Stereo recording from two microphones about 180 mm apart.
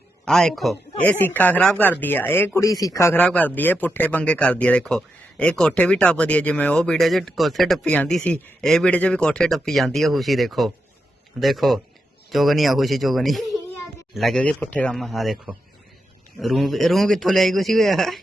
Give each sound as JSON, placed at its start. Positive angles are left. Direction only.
{"t": 0.3, "sound": "speech", "side_deg": 5}